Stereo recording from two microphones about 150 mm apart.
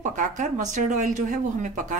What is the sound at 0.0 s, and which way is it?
Speech, 60° right (ahead or behind).